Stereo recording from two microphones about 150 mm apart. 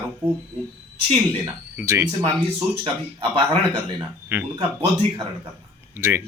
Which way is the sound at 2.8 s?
35° right (ahead or behind).